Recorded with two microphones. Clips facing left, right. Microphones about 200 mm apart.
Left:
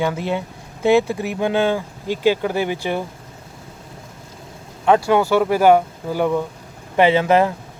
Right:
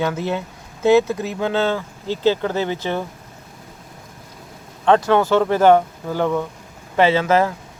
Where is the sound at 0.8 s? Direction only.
15° left (ahead or behind).